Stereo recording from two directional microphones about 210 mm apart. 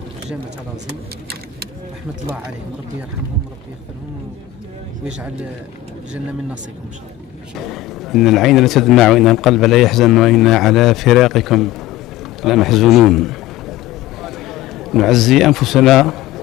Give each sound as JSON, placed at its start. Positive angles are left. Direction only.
{"t": 5.0, "sound": "speech", "side_deg": -5}
{"t": 7.5, "sound": "a man's voice", "side_deg": 0}